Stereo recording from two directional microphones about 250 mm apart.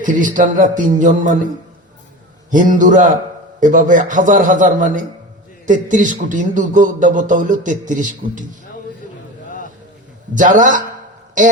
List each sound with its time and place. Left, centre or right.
0.0 s a man's voice: right
2.5 s a man's voice: right
10.3 s a man's voice: right